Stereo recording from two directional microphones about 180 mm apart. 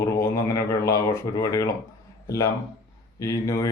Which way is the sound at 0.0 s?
15° left (ahead or behind).